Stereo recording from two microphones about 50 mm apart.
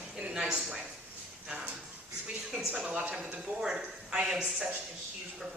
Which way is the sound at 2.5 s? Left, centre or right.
Centre.